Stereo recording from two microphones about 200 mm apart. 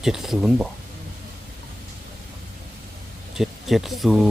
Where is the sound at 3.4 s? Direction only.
Centre (ahead or behind).